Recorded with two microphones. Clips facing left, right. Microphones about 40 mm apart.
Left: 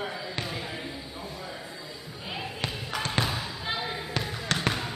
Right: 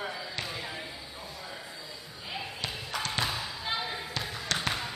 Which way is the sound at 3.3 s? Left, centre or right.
Centre.